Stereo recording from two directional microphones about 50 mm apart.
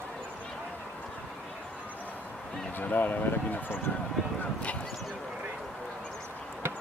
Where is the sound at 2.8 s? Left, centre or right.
Left.